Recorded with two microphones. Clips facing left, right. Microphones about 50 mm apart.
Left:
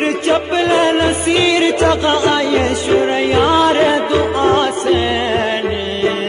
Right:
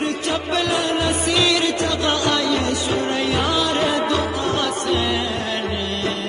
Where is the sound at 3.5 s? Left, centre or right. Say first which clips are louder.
Left 8 dB; left.